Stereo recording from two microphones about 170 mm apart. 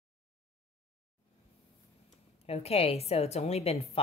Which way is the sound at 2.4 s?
35° left (ahead or behind).